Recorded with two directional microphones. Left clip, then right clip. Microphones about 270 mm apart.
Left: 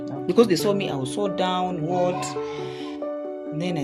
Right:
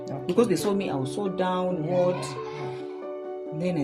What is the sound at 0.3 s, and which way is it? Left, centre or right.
Speech, left.